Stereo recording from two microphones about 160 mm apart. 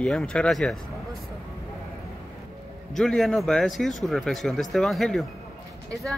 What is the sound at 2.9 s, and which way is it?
Speech, centre (ahead or behind).